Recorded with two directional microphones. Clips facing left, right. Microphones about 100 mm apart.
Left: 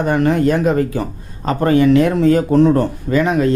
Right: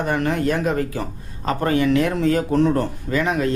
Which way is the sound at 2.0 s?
25° left (ahead or behind).